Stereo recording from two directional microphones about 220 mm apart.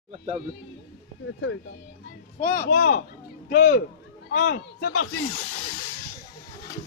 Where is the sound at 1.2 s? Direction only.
55° left (ahead or behind).